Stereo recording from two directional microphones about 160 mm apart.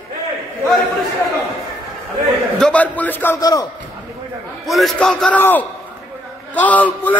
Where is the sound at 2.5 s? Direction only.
5° left (ahead or behind).